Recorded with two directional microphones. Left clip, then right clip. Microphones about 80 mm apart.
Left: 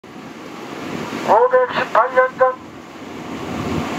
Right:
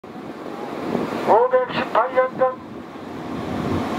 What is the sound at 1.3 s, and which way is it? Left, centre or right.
Vehicle, left.